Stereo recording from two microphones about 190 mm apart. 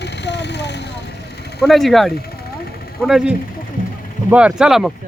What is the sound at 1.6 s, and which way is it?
A man's voice, centre (ahead or behind).